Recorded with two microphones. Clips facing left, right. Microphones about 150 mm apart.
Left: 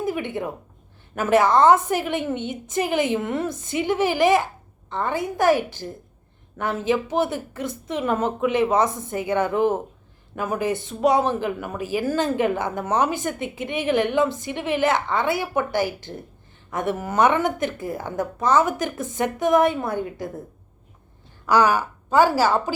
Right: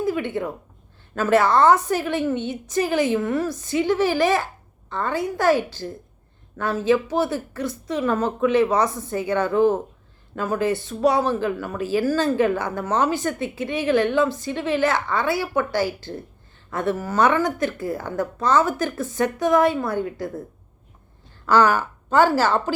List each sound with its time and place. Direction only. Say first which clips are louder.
0.0 s a sound: right 2 dB; 20° left (ahead or behind)
1.1 s speech: even; 20° left (ahead or behind)
6.6 s speech: right 3 dB; 20° left (ahead or behind)
21.4 s a woman's voice: right 1 dB; 15° left (ahead or behind)